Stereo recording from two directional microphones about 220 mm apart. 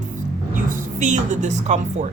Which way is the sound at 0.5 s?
35° right (ahead or behind).